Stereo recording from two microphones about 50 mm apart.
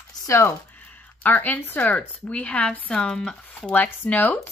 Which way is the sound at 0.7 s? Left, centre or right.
Left.